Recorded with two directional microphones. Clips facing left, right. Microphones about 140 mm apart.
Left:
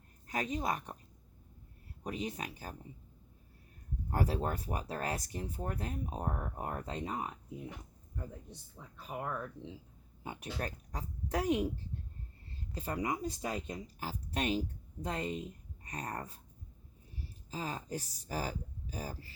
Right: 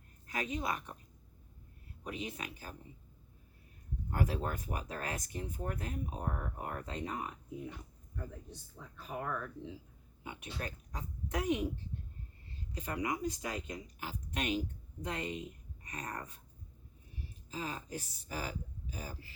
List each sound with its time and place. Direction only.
0.3 s speech: 40° left (ahead or behind)
2.0 s speech: 40° left (ahead or behind)
4.1 s speech: 35° left (ahead or behind)
9.0 s speech: 15° left (ahead or behind)
10.2 s speech: 40° left (ahead or behind)
12.7 s speech: 35° left (ahead or behind)
17.5 s speech: 35° left (ahead or behind)